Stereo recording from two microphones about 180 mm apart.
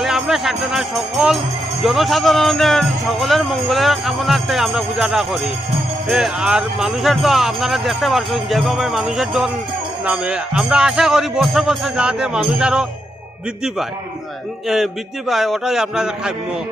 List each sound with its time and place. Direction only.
0.0 s speech: centre (ahead or behind)
14.7 s speech: centre (ahead or behind)